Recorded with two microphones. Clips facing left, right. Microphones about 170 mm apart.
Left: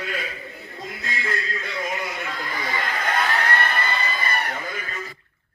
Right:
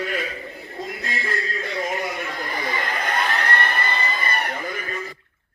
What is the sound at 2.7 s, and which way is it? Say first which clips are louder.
Crowd: right 1 dB; 45° left (ahead or behind).